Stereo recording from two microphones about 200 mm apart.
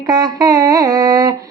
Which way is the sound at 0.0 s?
20° right (ahead or behind).